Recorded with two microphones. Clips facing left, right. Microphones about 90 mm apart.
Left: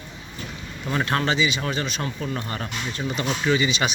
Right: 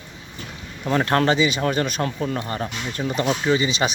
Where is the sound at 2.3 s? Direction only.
25° right (ahead or behind).